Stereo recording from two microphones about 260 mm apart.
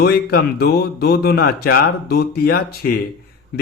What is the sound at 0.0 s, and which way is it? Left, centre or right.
A man's voice, left.